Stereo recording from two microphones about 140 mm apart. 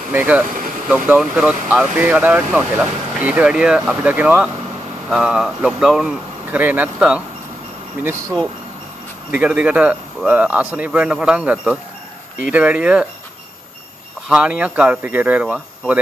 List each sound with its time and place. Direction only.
0.1 s speech: 10° right (ahead or behind)
14.3 s speech: 10° right (ahead or behind)